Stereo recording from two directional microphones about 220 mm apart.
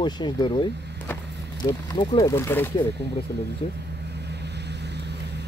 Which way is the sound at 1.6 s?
20° left (ahead or behind).